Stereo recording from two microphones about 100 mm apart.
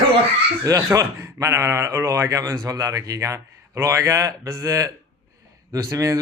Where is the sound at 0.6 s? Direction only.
35° right (ahead or behind).